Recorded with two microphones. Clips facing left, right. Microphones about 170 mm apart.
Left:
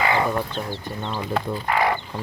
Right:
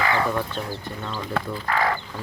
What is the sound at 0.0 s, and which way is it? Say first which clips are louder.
Speech: left 1 dB; 20° left (ahead or behind).